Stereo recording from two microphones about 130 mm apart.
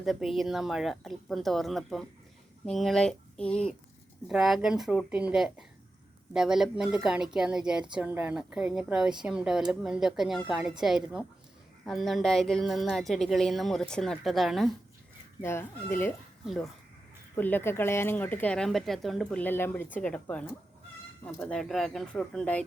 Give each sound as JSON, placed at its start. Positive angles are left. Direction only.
{"t": 0.0, "sound": "a woman's voice", "side_deg": 0}
{"t": 15.4, "sound": "speech", "side_deg": 20}
{"t": 17.3, "sound": "speech", "side_deg": 15}
{"t": 21.4, "sound": "speech", "side_deg": 5}